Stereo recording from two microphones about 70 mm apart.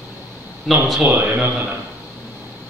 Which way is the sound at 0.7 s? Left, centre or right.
Centre.